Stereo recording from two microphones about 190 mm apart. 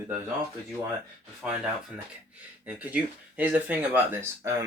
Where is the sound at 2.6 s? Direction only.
10° right (ahead or behind).